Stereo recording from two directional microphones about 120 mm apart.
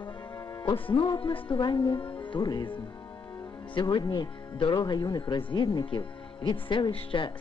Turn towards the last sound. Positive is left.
turn(degrees=45)  # may be behind; listen again after turning